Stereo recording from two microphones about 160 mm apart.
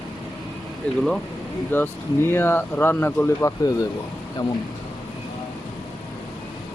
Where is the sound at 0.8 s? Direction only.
10° left (ahead or behind).